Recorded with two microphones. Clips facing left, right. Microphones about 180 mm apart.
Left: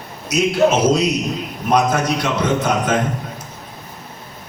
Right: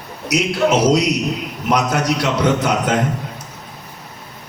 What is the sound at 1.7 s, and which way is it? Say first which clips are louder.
A man's voice: left 1 dB; 65° right (ahead or behind).